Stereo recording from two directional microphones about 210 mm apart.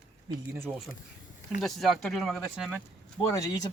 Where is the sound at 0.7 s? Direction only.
Centre (ahead or behind).